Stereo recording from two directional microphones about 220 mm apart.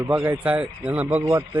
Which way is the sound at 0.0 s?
10° right (ahead or behind).